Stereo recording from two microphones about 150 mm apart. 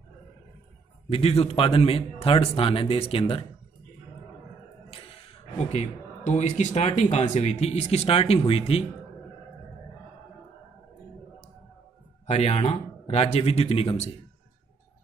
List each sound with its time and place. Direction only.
1.1 s speech: 40° left (ahead or behind)
5.6 s speech: 45° left (ahead or behind)
12.3 s speech: 45° left (ahead or behind)